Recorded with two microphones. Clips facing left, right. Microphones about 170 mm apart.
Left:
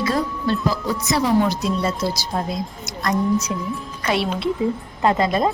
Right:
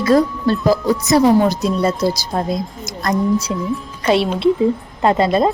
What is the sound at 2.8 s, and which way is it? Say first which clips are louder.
A woman's voice: right 2 dB; 35° right (ahead or behind).